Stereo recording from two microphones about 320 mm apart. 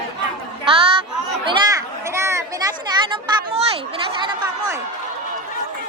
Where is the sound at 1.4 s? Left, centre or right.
Centre.